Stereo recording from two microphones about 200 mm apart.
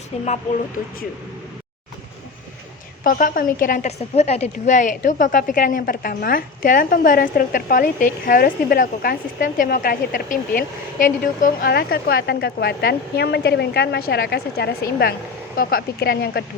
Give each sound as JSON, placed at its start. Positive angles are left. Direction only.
{"t": 3.0, "sound": "a woman's voice", "side_deg": 45}